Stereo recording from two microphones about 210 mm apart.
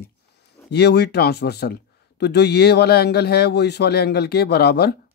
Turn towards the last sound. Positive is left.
turn(degrees=50)  # may be behind; listen again after turning